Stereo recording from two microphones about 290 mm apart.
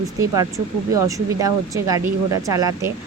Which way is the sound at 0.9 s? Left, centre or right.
Centre.